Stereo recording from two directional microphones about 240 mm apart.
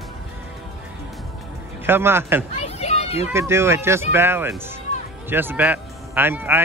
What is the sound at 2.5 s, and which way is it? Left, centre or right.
Children playing, left.